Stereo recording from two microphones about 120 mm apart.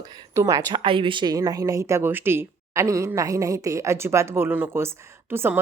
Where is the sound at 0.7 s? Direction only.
45° right (ahead or behind).